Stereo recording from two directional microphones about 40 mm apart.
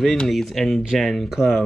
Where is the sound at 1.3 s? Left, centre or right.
Centre.